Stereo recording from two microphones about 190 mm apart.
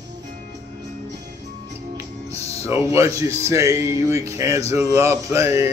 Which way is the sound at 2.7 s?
15° right (ahead or behind).